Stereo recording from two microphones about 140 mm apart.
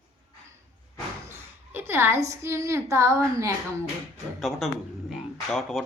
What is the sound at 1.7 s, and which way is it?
A woman's voice, 20° right (ahead or behind).